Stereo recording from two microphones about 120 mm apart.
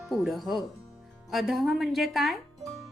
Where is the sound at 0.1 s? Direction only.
Centre (ahead or behind).